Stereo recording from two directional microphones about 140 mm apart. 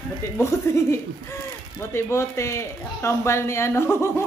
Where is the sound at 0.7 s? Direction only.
20° left (ahead or behind).